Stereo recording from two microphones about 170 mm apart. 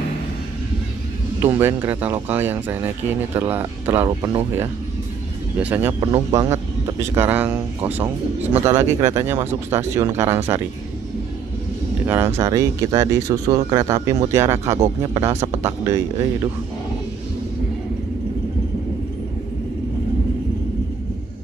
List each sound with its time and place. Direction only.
1.4 s speech: 15° right (ahead or behind)
5.6 s speech: 10° right (ahead or behind)
12.1 s speech: 15° right (ahead or behind)